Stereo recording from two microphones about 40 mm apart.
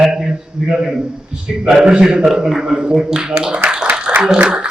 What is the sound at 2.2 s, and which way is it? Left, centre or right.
A man's voice, centre.